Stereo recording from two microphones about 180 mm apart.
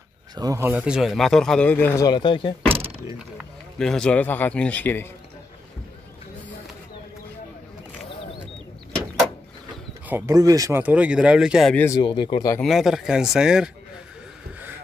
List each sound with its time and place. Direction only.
0.4 s speech: 15° right (ahead or behind); by 2.0 s 10° left (ahead or behind)
2.0 s speech: 25° left (ahead or behind)
2.7 s door: 30° right (ahead or behind)
3.3 s a man's voice: 5° left (ahead or behind)
10.0 s speech: 15° right (ahead or behind)
11.7 s a man's voice: 10° left (ahead or behind)
12.0 s speech: 25° left (ahead or behind)
12.5 s speech: centre (ahead or behind)